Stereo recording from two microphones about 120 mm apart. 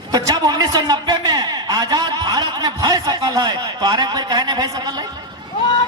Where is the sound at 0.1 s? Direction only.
35° right (ahead or behind).